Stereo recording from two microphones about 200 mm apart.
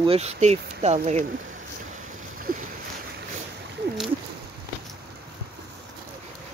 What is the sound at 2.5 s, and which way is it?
Boat, 50° right (ahead or behind).